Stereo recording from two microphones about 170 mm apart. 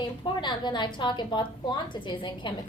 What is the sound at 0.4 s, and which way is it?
A woman's voice, 25° left (ahead or behind).